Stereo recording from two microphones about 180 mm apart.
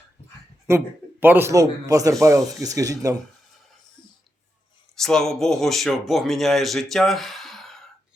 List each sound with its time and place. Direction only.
1.2 s speech: 10° right (ahead or behind)
4.9 s speech: centre (ahead or behind)